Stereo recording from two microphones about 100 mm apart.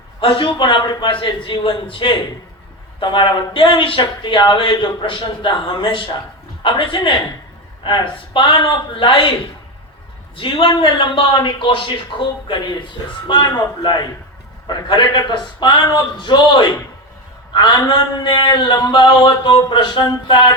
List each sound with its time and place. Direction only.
0.2 s speech: 60° left (ahead or behind)
10.3 s a man's voice: 60° left (ahead or behind)